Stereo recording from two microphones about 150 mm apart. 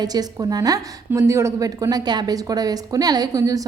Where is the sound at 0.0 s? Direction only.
25° right (ahead or behind).